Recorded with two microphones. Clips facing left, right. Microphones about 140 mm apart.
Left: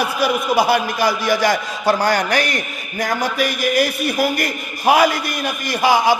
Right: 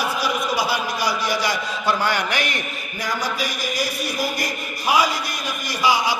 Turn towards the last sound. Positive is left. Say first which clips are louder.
# left 5 dB
turn(degrees=50)  # may be behind; listen again after turning